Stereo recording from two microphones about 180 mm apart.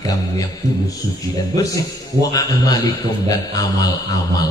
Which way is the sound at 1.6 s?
20° left (ahead or behind).